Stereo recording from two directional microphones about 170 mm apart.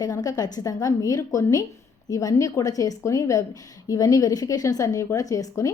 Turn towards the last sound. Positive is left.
turn(degrees=20)  # may be behind; listen again after turning